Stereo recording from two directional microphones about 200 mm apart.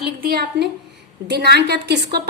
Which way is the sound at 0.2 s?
50° right (ahead or behind).